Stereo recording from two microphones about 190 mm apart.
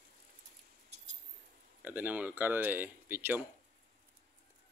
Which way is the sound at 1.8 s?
10° right (ahead or behind).